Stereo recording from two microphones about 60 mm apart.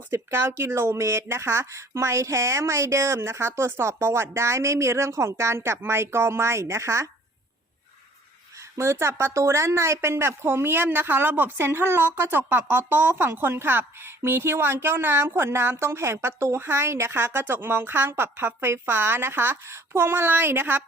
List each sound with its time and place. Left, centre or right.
0.1 s speech: right
8.8 s a woman's voice: right